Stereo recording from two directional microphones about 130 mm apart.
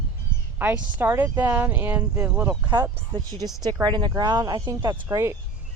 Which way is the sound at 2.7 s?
30° right (ahead or behind).